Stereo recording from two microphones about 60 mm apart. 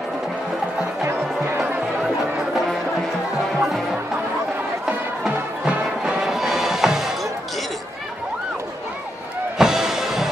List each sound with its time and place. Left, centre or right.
5.2 s music: centre
6.2 s music: centre
9.6 s music: centre